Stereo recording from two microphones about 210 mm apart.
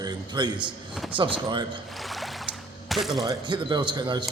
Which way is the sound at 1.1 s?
25° right (ahead or behind).